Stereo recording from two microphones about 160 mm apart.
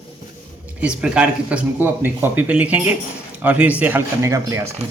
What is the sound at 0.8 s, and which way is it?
Speech, 5° right (ahead or behind).